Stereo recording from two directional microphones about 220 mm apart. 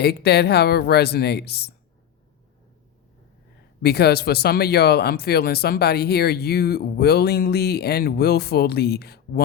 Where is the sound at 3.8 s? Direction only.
45° left (ahead or behind).